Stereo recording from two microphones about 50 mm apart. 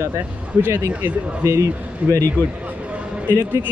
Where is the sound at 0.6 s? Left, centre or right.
Right.